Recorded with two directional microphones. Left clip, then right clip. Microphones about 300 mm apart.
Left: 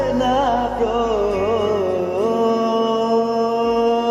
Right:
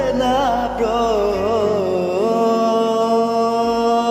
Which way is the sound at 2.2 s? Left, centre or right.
Right.